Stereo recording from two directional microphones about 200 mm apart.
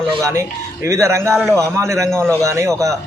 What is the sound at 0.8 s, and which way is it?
Speech, 15° right (ahead or behind).